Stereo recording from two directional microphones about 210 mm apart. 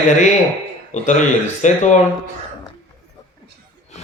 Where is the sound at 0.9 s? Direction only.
35° left (ahead or behind).